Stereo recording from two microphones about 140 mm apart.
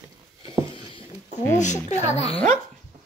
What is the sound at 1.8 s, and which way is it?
Speech, 55° left (ahead or behind).